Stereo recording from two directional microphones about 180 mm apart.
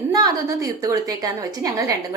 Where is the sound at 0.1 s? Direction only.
20° right (ahead or behind).